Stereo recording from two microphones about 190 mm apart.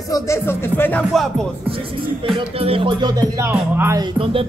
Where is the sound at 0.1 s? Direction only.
15° left (ahead or behind).